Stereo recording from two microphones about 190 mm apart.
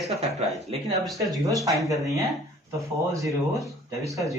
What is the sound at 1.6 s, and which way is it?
Speech, 15° right (ahead or behind).